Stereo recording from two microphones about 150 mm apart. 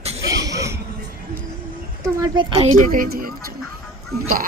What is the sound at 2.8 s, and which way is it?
Speech, 70° right (ahead or behind).